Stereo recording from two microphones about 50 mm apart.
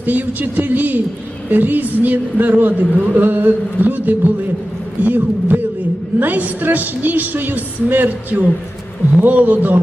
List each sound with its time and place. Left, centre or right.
0.0 s a man's voice: right